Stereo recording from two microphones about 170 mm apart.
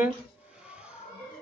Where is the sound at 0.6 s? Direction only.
5° right (ahead or behind).